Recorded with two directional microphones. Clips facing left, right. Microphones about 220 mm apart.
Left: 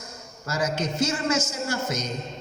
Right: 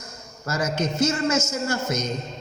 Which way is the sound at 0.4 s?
45° right (ahead or behind).